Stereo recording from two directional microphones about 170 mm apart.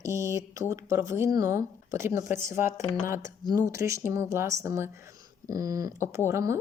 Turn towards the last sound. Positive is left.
turn(degrees=-15)  # may be behind; listen again after turning